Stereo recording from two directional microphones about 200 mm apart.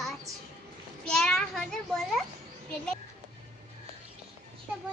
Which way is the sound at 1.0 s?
5° left (ahead or behind).